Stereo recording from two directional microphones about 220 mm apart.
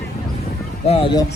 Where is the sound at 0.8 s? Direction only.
25° left (ahead or behind).